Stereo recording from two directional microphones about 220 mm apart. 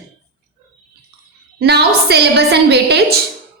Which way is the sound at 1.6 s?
45° right (ahead or behind).